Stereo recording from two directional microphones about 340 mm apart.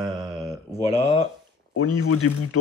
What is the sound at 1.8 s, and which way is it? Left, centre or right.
Speech, left.